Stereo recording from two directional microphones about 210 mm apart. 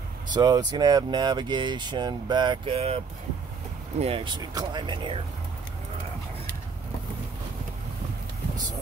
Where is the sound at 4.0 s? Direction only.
25° right (ahead or behind).